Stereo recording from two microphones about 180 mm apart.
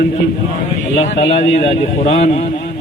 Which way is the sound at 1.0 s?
35° left (ahead or behind).